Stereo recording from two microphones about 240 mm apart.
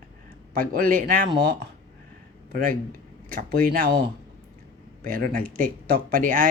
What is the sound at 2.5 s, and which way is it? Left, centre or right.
Speech, right.